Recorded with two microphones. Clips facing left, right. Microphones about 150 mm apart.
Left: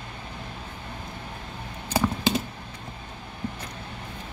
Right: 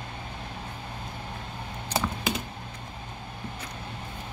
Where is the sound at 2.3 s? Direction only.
30° left (ahead or behind).